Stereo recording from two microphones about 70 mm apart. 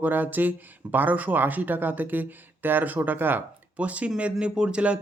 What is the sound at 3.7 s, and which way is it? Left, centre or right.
Speech, centre.